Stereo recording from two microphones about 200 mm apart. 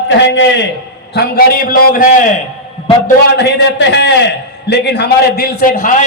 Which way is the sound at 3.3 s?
60° left (ahead or behind).